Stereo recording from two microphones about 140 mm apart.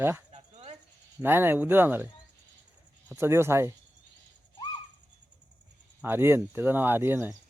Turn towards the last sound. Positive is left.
turn(degrees=-15)  # may be behind; listen again after turning